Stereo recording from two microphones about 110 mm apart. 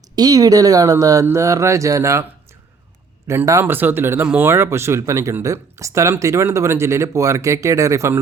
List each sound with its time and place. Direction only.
0.2 s speech: 35° right (ahead or behind)
3.2 s speech: 30° right (ahead or behind)